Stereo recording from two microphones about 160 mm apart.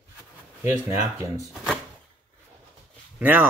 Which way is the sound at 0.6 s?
15° right (ahead or behind).